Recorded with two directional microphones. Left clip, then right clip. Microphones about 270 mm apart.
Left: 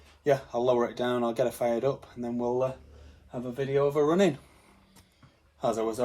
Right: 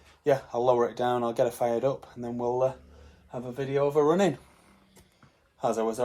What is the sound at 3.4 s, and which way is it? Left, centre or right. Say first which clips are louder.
Speech: left 1 dB; centre.